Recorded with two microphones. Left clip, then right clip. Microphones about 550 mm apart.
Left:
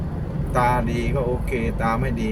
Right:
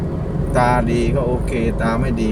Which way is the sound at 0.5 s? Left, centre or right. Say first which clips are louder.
Right 4 dB; left.